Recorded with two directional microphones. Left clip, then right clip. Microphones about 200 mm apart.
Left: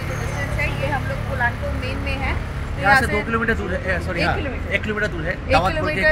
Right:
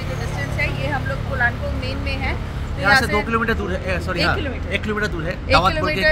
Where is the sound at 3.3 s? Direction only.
15° right (ahead or behind).